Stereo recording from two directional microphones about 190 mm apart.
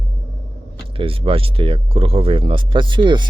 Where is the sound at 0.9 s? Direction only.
30° right (ahead or behind).